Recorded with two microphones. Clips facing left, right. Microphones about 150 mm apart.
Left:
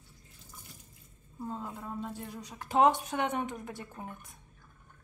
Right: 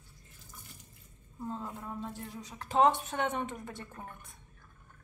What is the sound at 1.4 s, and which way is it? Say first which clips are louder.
Speech: even; 5° left (ahead or behind).